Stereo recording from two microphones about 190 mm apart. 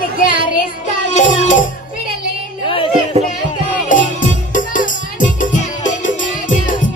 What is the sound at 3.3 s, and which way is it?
Music, 45° left (ahead or behind).